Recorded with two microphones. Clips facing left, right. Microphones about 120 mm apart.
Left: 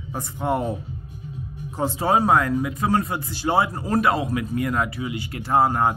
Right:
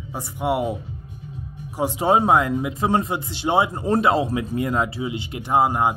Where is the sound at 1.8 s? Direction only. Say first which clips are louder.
Right 2 dB; 15° right (ahead or behind).